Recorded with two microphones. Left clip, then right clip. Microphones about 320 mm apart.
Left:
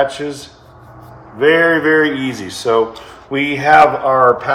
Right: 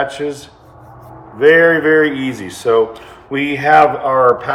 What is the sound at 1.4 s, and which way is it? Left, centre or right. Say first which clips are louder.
A man's voice: right 2 dB; centre.